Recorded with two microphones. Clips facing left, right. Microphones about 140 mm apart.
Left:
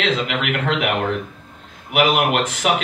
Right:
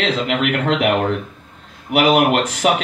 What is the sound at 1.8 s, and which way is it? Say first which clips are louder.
Speech: right 3 dB; 40° right (ahead or behind).